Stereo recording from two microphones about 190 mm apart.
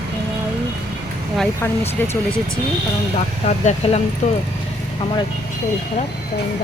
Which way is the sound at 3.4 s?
35° left (ahead or behind).